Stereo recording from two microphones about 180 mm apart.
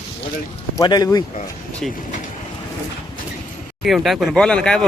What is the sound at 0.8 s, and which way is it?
Speech, 20° left (ahead or behind).